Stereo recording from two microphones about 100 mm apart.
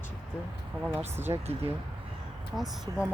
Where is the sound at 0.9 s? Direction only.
25° right (ahead or behind).